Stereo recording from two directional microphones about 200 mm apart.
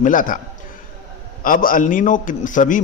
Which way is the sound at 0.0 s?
40° left (ahead or behind).